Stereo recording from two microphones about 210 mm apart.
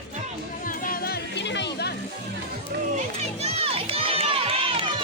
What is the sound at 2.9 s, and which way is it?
Crowd, 30° right (ahead or behind).